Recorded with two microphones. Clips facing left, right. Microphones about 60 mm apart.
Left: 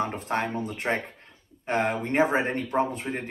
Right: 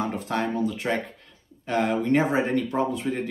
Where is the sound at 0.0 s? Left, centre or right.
Left.